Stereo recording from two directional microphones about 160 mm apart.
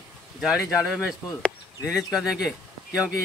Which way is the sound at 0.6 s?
20° left (ahead or behind).